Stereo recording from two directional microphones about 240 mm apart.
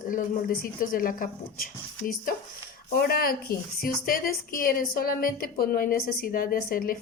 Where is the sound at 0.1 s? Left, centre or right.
Left.